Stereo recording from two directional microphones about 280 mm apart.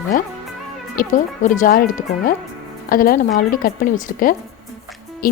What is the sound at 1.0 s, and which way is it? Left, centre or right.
A woman's voice, left.